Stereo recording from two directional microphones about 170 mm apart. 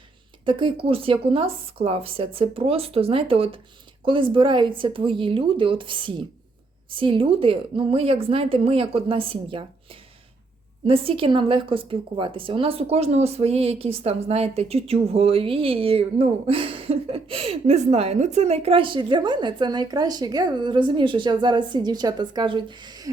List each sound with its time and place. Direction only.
0.4 s a woman's voice: 30° right (ahead or behind)